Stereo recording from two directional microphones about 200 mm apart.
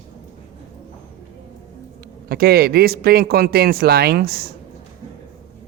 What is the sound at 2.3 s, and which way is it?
Speech, 50° right (ahead or behind).